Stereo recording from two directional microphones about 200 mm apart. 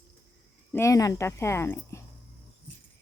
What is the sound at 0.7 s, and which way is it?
Speech, 15° left (ahead or behind).